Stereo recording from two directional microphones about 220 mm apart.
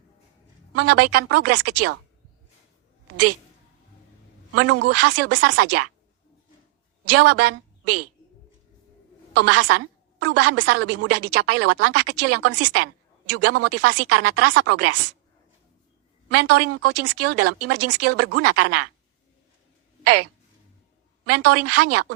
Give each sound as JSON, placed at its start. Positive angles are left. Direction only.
{"t": 0.8, "sound": "speech", "side_deg": -90}
{"t": 4.5, "sound": "speech", "side_deg": -90}
{"t": 7.0, "sound": "a woman's voice", "side_deg": -90}
{"t": 9.3, "sound": "a woman's voice", "side_deg": -90}
{"t": 16.3, "sound": "speech", "side_deg": -90}
{"t": 21.2, "sound": "speech", "side_deg": -90}